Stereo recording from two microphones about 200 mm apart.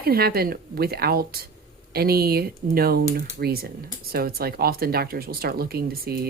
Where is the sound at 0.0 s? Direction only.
50° right (ahead or behind).